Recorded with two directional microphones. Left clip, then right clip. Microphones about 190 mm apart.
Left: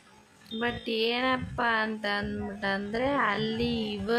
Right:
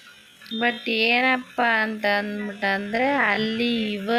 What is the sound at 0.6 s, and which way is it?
Speech, 15° right (ahead or behind).